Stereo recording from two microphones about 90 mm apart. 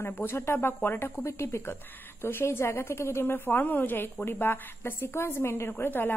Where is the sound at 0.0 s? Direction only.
25° left (ahead or behind).